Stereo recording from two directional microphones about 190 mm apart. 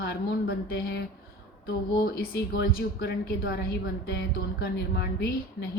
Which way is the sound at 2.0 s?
55° left (ahead or behind).